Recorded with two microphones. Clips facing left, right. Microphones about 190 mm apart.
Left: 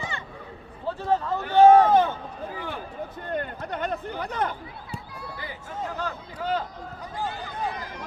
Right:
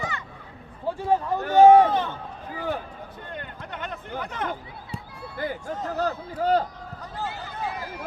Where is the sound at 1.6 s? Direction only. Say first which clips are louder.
Right 1 dB; 15° right (ahead or behind).